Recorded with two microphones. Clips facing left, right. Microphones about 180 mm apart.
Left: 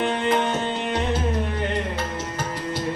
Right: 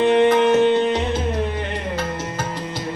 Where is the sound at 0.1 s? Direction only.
65° right (ahead or behind).